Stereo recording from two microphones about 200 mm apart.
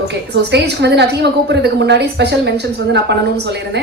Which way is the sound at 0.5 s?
55° right (ahead or behind).